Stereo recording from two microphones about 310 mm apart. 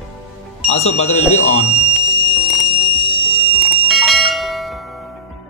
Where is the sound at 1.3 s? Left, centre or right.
Left.